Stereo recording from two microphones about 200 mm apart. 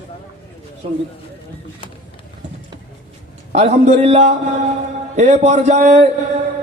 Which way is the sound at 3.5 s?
35° right (ahead or behind).